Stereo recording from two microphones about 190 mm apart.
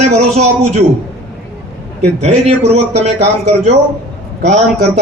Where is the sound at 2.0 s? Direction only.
35° right (ahead or behind).